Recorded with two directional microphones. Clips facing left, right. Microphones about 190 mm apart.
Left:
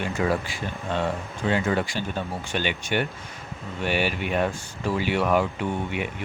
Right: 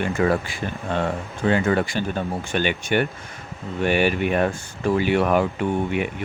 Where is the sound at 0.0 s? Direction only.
55° right (ahead or behind).